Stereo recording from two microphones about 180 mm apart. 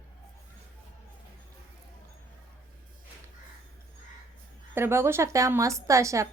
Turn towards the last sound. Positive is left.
turn(degrees=-15)  # may be behind; listen again after turning